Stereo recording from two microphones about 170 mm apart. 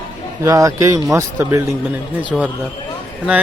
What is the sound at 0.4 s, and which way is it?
Speech, 20° right (ahead or behind).